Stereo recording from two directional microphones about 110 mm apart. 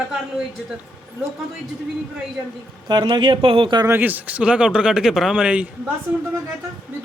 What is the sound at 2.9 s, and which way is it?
Speech, 45° right (ahead or behind).